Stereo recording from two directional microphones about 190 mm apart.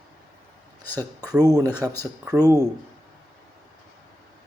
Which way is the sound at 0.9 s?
20° right (ahead or behind).